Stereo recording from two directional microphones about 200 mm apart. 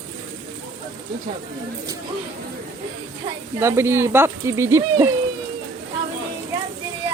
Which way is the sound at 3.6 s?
15° right (ahead or behind).